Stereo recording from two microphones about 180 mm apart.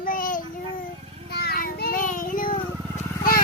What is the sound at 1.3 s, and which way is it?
Child singing, 60° left (ahead or behind).